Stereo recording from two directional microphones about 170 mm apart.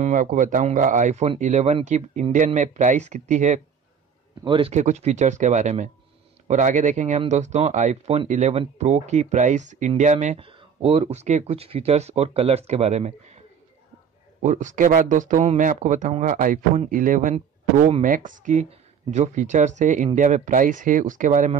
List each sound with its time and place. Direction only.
0.0 s speech: 50° right (ahead or behind)
4.5 s speech: 35° right (ahead or behind)
14.4 s speech: 45° right (ahead or behind)